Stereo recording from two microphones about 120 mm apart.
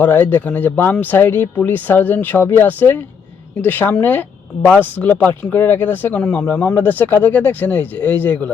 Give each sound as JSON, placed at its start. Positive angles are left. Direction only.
{"t": 0.0, "sound": "speech", "side_deg": 15}